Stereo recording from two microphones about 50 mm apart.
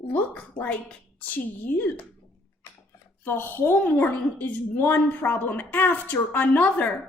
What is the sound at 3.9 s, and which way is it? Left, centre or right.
A woman's voice, left.